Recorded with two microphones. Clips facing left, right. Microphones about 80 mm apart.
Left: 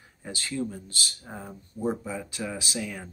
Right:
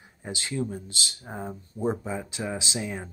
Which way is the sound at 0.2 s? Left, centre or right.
Right.